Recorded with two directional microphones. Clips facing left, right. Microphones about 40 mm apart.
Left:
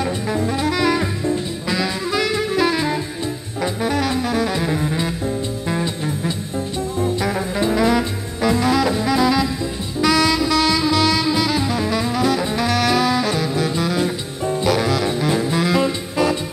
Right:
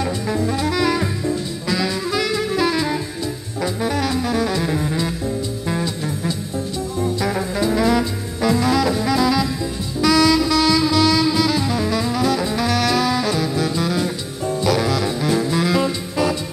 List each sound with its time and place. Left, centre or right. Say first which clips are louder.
0.7 s music: left 2 dB; left
1.8 s saxophone: left 1 dB; left
3.6 s music: left 1 dB; left
7.6 s music: even; left
10.0 s saxophone: right 2 dB; left
14.4 s music: even; left